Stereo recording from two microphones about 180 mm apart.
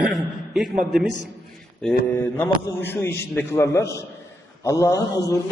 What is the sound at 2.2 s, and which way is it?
A man's voice, 15° left (ahead or behind).